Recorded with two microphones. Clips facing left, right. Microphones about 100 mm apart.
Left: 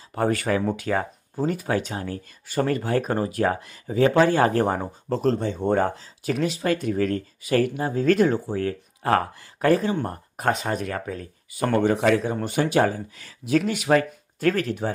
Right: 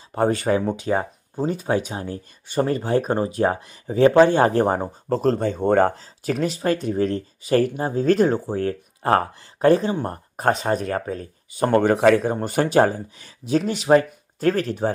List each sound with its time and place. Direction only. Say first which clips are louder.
0.1 s speech: right 3 dB; 25° right (ahead or behind)
5.0 s speech: right 2 dB; 40° right (ahead or behind)
6.6 s speech: right 2 dB; 30° right (ahead or behind)
11.7 s speech: right 4 dB; 50° right (ahead or behind); by 14.9 s 35° right (ahead or behind)